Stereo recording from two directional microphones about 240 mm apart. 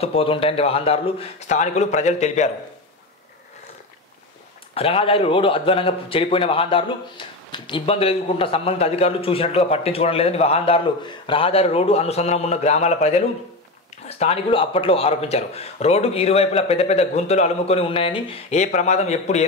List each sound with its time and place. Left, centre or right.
0.0 s a man's voice: left
4.7 s a man's voice: left